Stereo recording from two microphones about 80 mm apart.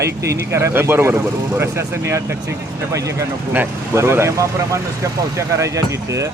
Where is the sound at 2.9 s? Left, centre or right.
Right.